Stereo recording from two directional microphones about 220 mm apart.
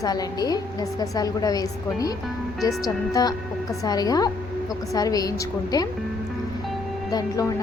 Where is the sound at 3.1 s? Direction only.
15° left (ahead or behind).